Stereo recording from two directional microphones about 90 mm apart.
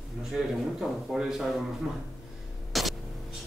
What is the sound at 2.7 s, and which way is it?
Hum, centre (ahead or behind).